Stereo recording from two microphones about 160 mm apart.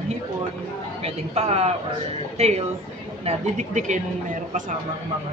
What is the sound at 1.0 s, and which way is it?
Speech, 40° right (ahead or behind).